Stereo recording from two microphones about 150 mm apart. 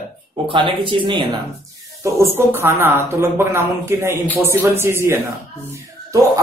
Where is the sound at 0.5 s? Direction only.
35° right (ahead or behind).